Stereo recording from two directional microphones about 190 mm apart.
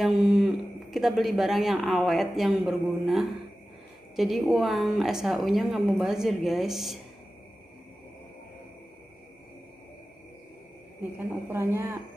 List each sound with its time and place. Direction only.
0.0 s speech: centre (ahead or behind)
11.0 s speech: 10° right (ahead or behind)